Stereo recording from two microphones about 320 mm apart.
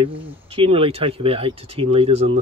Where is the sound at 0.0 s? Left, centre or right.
Centre.